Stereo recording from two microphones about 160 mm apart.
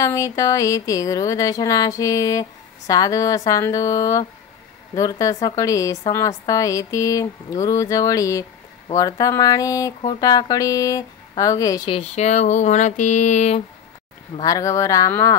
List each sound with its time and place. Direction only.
0.0 s a woman's voice: 20° left (ahead or behind)
11.9 s a sound: 45° left (ahead or behind)
14.4 s a woman's voice: 20° left (ahead or behind)